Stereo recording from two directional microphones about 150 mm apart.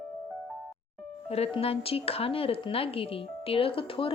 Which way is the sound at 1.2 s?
40° left (ahead or behind).